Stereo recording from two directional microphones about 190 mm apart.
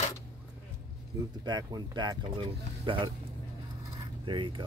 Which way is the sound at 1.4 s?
20° right (ahead or behind).